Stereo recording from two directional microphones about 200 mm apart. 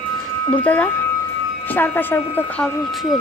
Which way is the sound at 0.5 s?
5° left (ahead or behind).